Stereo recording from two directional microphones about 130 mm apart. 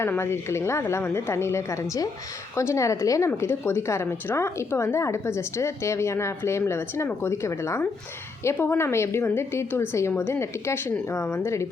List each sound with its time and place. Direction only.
0.0 s a woman's voice: 20° left (ahead or behind)